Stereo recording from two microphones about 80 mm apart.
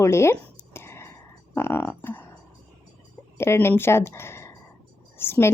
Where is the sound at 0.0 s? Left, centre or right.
Left.